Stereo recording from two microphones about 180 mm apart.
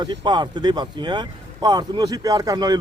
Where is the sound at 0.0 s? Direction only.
25° right (ahead or behind).